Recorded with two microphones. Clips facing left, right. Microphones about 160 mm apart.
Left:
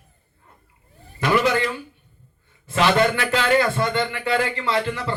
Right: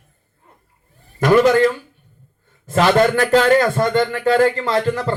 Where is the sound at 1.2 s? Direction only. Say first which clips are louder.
Right 7 dB; 45° right (ahead or behind).